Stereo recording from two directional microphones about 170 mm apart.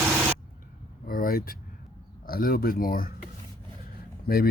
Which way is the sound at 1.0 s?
55° left (ahead or behind).